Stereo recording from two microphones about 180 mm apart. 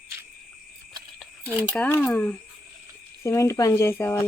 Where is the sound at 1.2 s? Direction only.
10° right (ahead or behind).